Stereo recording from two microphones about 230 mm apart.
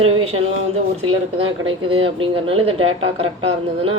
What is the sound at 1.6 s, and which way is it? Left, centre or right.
Speech, right.